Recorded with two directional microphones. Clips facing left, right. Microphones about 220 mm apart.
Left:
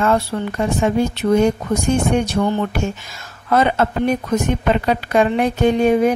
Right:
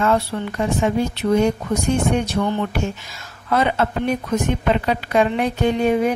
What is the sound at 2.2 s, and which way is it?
A woman's voice, 45° left (ahead or behind).